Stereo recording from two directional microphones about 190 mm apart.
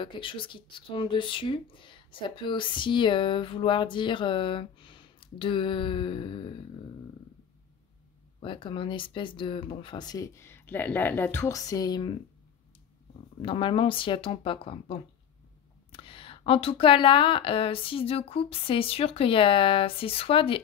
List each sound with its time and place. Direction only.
0.0 s speech: 25° left (ahead or behind)
8.4 s speech: 25° left (ahead or behind)
13.4 s speech: 25° left (ahead or behind)